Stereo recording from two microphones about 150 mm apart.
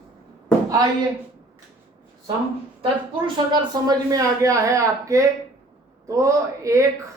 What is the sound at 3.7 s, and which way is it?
A man's voice, 25° right (ahead or behind).